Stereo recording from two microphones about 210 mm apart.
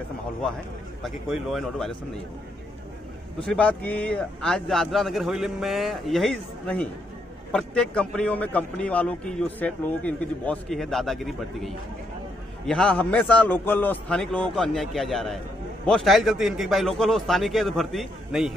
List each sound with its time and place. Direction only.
1.0 s a man's voice: centre (ahead or behind)
3.3 s a man's voice: 5° left (ahead or behind)